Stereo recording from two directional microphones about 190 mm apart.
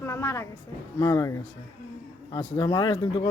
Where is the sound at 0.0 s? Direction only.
15° left (ahead or behind).